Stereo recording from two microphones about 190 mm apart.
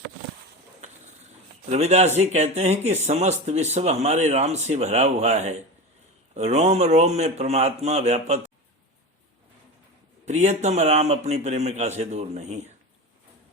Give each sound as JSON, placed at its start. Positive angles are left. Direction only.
{"t": 1.7, "sound": "speech", "side_deg": -35}
{"t": 10.2, "sound": "speech", "side_deg": -40}